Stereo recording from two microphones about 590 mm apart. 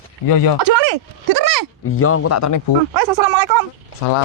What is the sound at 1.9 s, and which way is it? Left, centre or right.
Speech, left.